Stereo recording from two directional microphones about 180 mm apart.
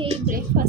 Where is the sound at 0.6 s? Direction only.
55° right (ahead or behind).